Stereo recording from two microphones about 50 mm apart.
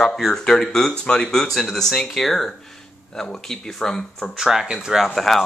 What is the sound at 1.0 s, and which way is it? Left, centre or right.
Speech, left.